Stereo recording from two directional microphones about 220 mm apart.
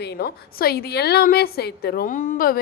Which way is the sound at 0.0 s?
45° left (ahead or behind).